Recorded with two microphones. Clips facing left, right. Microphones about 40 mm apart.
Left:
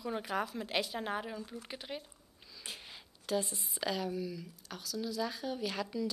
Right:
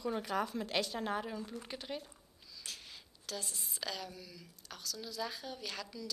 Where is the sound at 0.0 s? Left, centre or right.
Centre.